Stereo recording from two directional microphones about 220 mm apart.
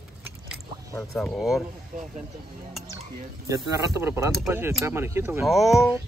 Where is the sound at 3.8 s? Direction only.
10° right (ahead or behind).